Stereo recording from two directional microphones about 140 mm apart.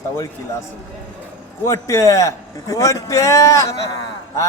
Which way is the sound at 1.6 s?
25° left (ahead or behind).